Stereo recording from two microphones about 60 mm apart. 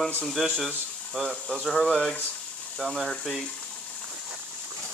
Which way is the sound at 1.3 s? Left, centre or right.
Centre.